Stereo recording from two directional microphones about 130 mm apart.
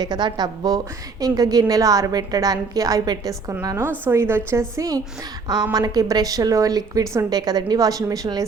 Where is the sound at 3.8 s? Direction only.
15° right (ahead or behind).